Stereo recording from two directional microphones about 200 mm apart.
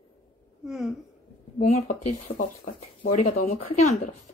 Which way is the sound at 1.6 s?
35° left (ahead or behind).